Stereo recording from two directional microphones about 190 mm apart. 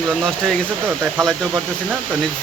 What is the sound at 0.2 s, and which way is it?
Speech, 5° left (ahead or behind).